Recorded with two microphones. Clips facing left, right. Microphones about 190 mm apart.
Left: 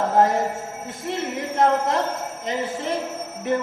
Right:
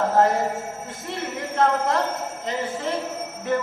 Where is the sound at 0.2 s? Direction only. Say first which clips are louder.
Left 2 dB; 15° left (ahead or behind).